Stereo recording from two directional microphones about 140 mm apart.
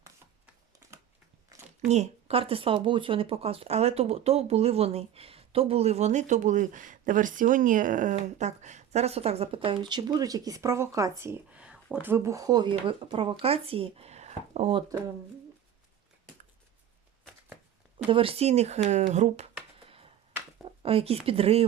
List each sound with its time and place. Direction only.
1.9 s speech: 50° right (ahead or behind); by 8.1 s 65° right (ahead or behind)
8.1 s speech: 55° right (ahead or behind)
9.6 s speech: 35° right (ahead or behind); by 12.1 s 10° right (ahead or behind)
12.1 s speech: 20° right (ahead or behind); by 14.8 s 50° right (ahead or behind)
18.1 s speech: 40° right (ahead or behind)
20.8 s speech: 45° right (ahead or behind)